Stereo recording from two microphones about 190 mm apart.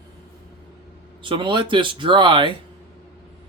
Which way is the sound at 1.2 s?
25° right (ahead or behind).